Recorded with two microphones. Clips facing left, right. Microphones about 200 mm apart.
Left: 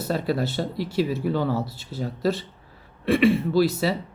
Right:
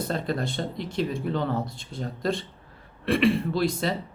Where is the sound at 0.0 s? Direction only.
5° left (ahead or behind).